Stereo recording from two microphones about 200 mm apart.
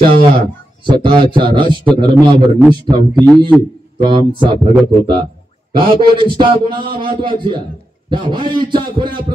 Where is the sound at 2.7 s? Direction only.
20° right (ahead or behind).